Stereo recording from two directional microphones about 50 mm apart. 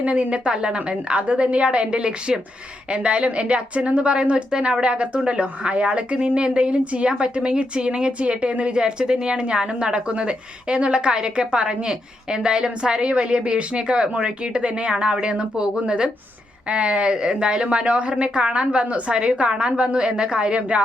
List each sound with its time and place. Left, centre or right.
0.0 s a woman's voice: right